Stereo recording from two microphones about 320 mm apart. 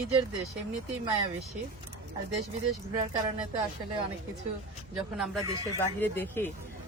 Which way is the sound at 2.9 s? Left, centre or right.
Centre.